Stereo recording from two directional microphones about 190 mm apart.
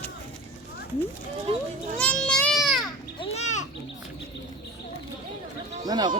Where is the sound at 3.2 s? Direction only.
30° left (ahead or behind).